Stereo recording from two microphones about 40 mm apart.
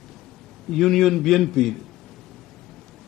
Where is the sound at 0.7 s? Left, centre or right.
Centre.